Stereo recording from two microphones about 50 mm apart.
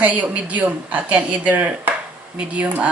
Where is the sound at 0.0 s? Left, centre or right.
Right.